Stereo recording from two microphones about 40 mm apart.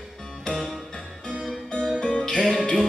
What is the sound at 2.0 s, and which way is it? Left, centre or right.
Music, centre.